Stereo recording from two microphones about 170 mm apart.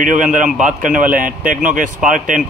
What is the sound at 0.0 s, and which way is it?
Speech, 50° right (ahead or behind).